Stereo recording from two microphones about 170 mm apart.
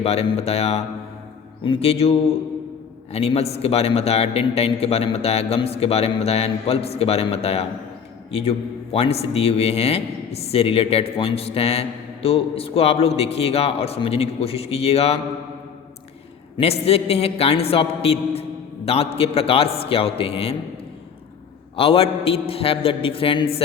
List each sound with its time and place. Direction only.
0.0 s a man's voice: 35° left (ahead or behind)
16.6 s a man's voice: 35° left (ahead or behind)
21.8 s a man's voice: 35° left (ahead or behind)